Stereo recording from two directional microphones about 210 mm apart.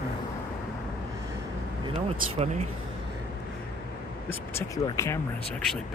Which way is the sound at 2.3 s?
30° right (ahead or behind).